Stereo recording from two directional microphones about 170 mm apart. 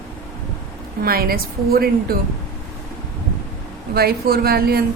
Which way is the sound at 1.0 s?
60° right (ahead or behind).